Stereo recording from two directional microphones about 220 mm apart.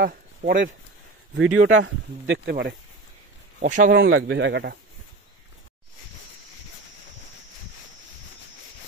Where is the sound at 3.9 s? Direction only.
55° right (ahead or behind).